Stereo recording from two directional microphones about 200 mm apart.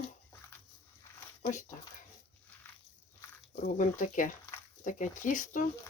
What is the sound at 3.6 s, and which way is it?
Speech, 40° left (ahead or behind).